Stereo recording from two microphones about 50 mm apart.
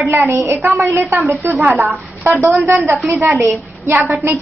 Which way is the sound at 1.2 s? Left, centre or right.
Right.